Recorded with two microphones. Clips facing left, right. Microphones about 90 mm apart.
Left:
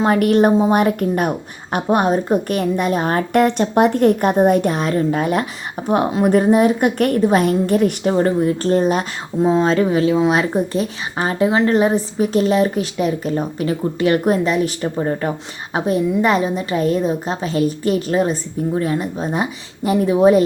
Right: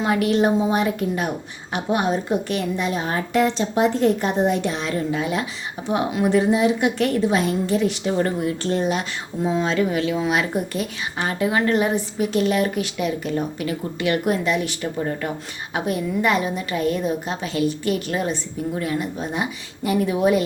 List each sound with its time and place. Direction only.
0.0 s speech: 50° left (ahead or behind)
8.1 s speech: 35° left (ahead or behind)